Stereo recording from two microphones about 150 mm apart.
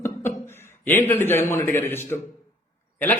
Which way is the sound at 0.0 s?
15° left (ahead or behind).